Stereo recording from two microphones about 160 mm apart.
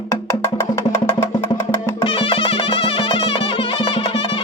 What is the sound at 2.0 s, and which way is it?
Music, 35° left (ahead or behind).